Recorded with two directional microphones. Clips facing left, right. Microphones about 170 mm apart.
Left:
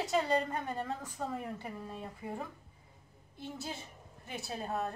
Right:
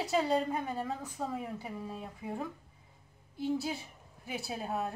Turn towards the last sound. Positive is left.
turn(degrees=-5)  # may be behind; listen again after turning